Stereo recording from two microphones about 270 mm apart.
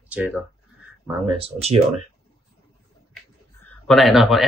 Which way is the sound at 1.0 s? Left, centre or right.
Centre.